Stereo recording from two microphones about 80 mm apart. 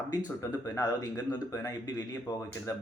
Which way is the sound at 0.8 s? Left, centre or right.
Left.